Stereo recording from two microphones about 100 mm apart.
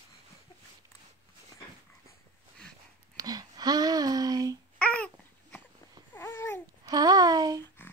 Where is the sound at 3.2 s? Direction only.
40° right (ahead or behind).